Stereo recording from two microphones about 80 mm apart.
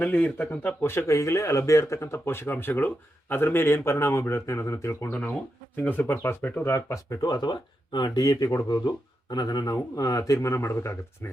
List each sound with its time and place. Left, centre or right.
0.0 s speech: centre
0.9 s speech: left
5.7 s speech: centre; by 7.3 s left
7.3 s speech: left